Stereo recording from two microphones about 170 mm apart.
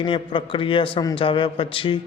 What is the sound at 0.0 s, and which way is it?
A man's voice, 30° left (ahead or behind).